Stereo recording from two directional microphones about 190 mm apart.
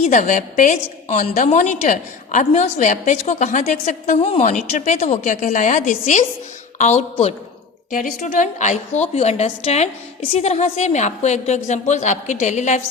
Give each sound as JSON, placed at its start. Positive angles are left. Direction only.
{"t": 0.0, "sound": "a woman's voice", "side_deg": 40}